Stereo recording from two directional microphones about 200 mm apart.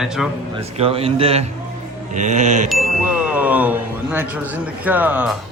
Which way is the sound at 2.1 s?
35° right (ahead or behind).